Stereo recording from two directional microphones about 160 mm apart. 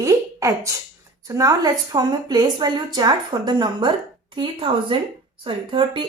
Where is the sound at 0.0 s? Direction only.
20° right (ahead or behind).